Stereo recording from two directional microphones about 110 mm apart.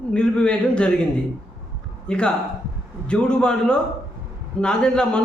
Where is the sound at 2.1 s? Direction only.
10° left (ahead or behind).